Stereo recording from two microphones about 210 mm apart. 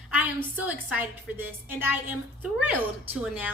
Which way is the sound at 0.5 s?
5° right (ahead or behind).